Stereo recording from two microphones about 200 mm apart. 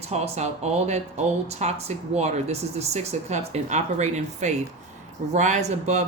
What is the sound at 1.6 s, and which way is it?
Speech, 35° right (ahead or behind).